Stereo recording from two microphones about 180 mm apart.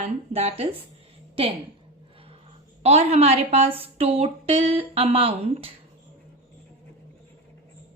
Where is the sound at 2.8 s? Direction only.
35° right (ahead or behind).